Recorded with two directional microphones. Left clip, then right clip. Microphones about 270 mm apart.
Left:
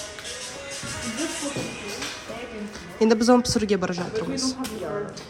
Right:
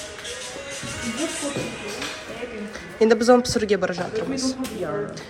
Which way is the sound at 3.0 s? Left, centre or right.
Left.